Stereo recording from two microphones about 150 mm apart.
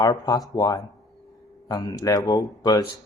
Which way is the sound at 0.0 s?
25° left (ahead or behind).